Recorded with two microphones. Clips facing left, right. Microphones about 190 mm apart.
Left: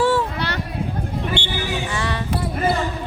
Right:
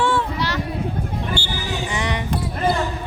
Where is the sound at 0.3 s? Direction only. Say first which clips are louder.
Right 2 dB; 60° left (ahead or behind).